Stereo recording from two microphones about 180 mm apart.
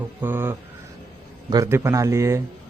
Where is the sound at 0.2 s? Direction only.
10° right (ahead or behind).